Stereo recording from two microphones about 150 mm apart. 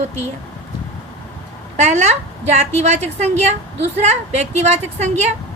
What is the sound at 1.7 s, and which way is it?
A woman's voice, 50° right (ahead or behind).